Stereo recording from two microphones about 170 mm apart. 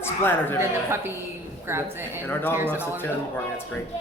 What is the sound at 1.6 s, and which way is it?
Speech, 15° right (ahead or behind).